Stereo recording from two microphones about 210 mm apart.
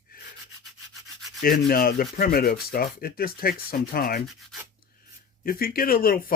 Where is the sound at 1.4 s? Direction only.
45° left (ahead or behind).